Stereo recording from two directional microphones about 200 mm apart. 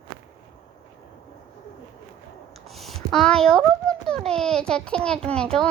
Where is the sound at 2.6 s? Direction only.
Centre (ahead or behind).